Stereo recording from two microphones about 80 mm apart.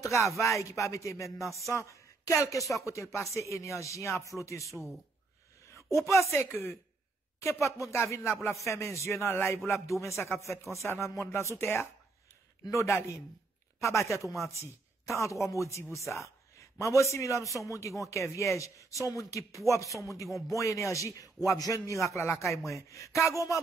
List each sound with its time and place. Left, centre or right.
0.0 s a man's voice: left
4.6 s a man's voice: centre
6.0 s a man's voice: left